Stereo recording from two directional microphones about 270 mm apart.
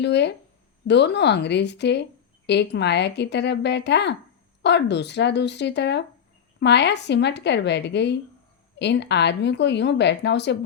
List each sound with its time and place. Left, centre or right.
0.0 s speech: left